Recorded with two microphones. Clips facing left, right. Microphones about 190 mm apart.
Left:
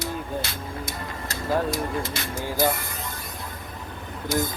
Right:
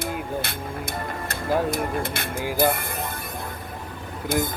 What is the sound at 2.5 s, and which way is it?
Speech, 55° right (ahead or behind).